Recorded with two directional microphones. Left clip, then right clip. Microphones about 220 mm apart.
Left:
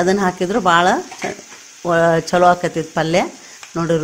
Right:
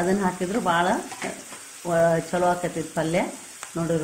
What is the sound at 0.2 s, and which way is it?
Speech, 50° left (ahead or behind).